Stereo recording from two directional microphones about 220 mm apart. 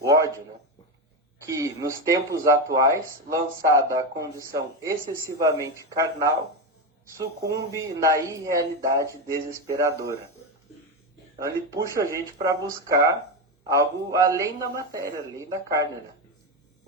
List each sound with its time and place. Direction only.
0.0 s a sound: 15° right (ahead or behind)
1.5 s speech: 15° right (ahead or behind)
11.3 s speech: 15° right (ahead or behind)